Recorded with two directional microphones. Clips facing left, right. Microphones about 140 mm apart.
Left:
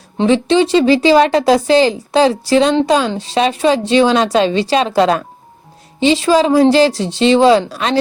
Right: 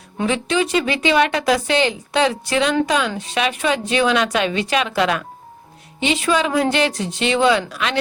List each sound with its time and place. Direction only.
0.2 s a woman's voice: 30° left (ahead or behind)